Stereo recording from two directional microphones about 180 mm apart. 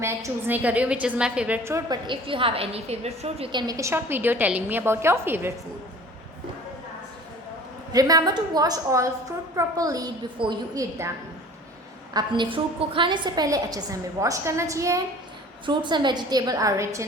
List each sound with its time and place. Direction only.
0.0 s a woman's voice: 15° right (ahead or behind)
2.0 s a woman's voice: 30° right (ahead or behind); by 5.5 s 10° right (ahead or behind)
7.9 s a woman's voice: 20° right (ahead or behind)
12.1 s a woman's voice: 25° right (ahead or behind)